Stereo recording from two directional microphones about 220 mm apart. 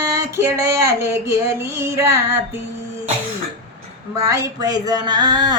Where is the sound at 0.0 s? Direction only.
10° right (ahead or behind).